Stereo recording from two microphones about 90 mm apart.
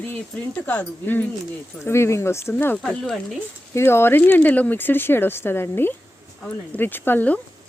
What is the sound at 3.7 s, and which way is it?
Speech, 25° left (ahead or behind).